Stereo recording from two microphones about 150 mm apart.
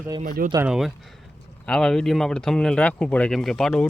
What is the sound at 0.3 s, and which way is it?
Speech, 85° right.